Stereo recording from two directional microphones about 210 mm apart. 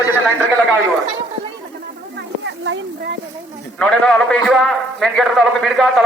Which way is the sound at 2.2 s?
60° right (ahead or behind).